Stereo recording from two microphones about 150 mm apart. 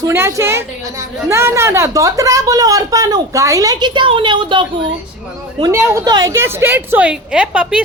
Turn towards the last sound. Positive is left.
turn(degrees=-5)  # may be behind; listen again after turning